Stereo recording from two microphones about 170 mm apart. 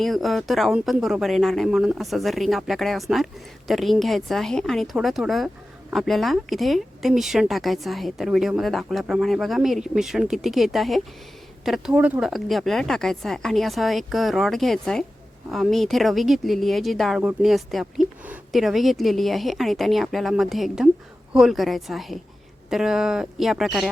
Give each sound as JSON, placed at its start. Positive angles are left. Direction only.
{"t": 0.0, "sound": "speech", "side_deg": 0}